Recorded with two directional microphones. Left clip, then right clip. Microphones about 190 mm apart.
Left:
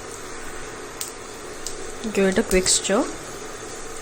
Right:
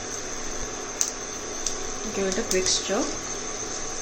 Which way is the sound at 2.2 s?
50° left (ahead or behind).